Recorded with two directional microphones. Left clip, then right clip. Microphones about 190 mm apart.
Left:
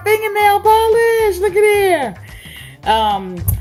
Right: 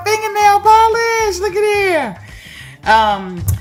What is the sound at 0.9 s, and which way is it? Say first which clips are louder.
Speech: left 2 dB; 30° right (ahead or behind).